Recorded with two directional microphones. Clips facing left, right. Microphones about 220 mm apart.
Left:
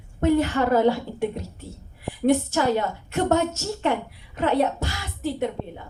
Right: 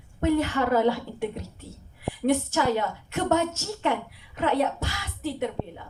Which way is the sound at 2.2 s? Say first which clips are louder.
Left 3 dB; 40° left (ahead or behind).